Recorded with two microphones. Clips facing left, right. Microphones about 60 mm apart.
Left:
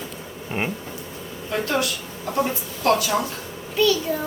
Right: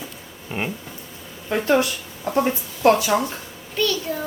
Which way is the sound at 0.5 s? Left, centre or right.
Centre.